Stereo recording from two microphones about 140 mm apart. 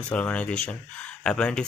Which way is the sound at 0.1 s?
10° left (ahead or behind).